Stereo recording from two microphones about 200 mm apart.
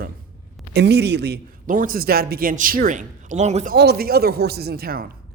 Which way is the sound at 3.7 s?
50° right (ahead or behind).